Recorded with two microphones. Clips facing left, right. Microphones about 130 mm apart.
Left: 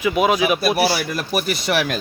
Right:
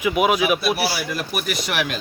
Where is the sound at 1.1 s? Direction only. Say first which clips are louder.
Left 3 dB; 40° left (ahead or behind).